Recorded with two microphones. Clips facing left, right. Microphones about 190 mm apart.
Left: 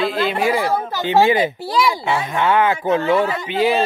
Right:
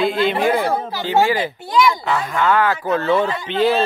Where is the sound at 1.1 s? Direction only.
20° left (ahead or behind).